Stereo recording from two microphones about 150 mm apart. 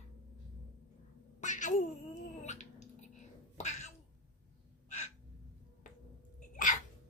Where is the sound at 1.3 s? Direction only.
55° left (ahead or behind).